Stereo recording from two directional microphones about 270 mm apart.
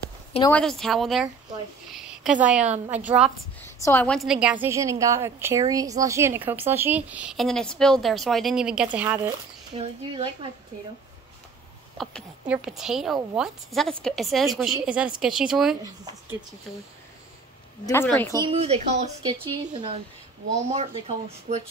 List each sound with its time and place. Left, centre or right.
0.5 s a woman's voice: centre
3.6 s a woman's voice: centre
9.8 s speech: centre
12.0 s a woman's voice: centre
15.8 s speech: centre
17.8 s speech: centre
18.4 s speech: right